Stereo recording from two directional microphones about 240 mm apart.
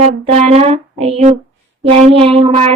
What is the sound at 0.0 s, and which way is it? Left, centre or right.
Speech, right.